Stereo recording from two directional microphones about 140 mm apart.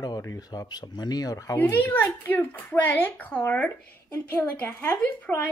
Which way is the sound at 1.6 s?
15° left (ahead or behind).